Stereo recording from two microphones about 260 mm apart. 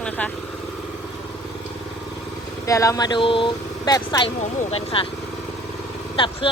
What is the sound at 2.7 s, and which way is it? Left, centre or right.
Speech, centre.